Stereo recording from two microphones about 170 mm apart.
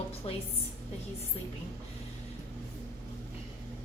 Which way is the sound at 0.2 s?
35° left (ahead or behind).